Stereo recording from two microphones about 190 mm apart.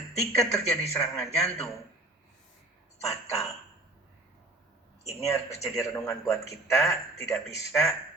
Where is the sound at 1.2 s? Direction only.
5° left (ahead or behind).